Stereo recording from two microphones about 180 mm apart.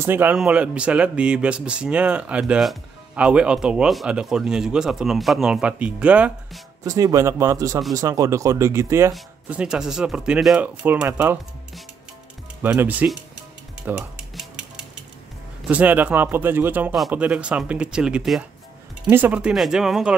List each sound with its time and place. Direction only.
0.0 s speech: 10° right (ahead or behind)
12.6 s speech: 10° right (ahead or behind)
13.8 s music: 5° right (ahead or behind)
15.7 s speech: 10° right (ahead or behind)